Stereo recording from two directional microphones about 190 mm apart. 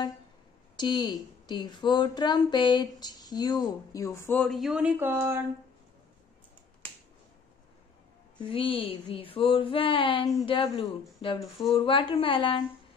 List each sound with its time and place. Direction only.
0.7 s speech: 20° left (ahead or behind); by 5.4 s 15° right (ahead or behind)
8.4 s speech: 25° left (ahead or behind)
11.4 s speech: centre (ahead or behind)
11.7 s speech: 25° left (ahead or behind)